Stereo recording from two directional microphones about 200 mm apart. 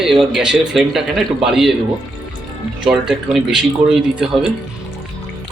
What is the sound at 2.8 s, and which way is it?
Speech, 5° right (ahead or behind).